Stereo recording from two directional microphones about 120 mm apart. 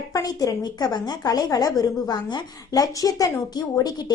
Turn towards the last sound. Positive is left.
turn(degrees=35)  # may be behind; listen again after turning